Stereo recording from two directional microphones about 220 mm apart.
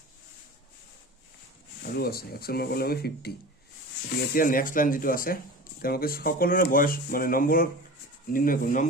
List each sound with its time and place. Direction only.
1.8 s speech: 45° left (ahead or behind)